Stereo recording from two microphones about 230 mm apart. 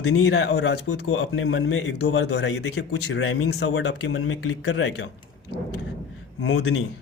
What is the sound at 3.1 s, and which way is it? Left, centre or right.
Speech, left.